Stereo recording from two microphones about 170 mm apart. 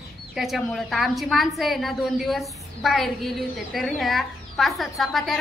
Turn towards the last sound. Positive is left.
turn(degrees=0)  # may be behind; listen again after turning